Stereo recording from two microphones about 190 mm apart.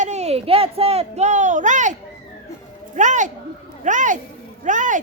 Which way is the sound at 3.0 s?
40° right (ahead or behind).